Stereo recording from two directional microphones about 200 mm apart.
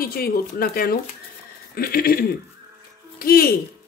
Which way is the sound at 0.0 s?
50° left (ahead or behind).